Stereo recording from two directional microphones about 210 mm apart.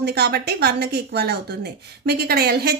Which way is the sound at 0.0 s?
50° right (ahead or behind).